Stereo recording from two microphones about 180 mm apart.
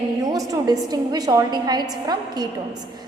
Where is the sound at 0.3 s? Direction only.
20° right (ahead or behind).